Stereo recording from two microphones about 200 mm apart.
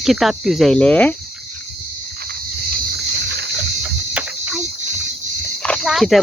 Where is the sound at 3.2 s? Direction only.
55° right (ahead or behind).